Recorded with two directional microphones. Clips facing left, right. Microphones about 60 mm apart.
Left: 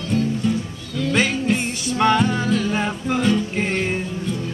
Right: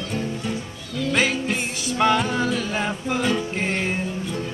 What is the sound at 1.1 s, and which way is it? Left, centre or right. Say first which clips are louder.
Music: left 3 dB; centre.